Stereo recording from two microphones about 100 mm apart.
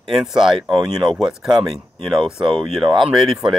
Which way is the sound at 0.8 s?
40° right (ahead or behind).